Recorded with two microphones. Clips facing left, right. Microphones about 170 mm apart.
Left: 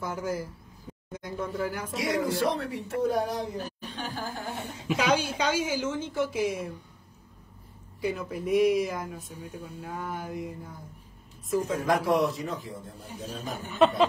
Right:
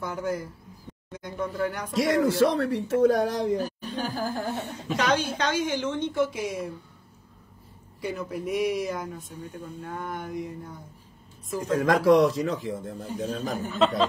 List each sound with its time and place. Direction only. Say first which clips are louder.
0.0 s speech: right 2 dB; centre (ahead or behind)
2.0 s speech: right 7 dB; 90° right
3.5 s speech: right 7 dB; 40° right (ahead or behind)
4.6 s a woman's voice: left 1 dB; 10° left (ahead or behind)
8.0 s speech: even; centre (ahead or behind)
11.7 s speech: right 8 dB; 90° right
13.7 s a woman's voice: left 2 dB; 10° left (ahead or behind)